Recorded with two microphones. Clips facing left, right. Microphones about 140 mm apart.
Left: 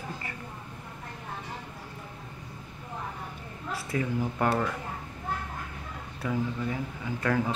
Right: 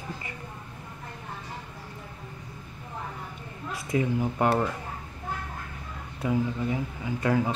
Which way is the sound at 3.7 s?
15° right (ahead or behind).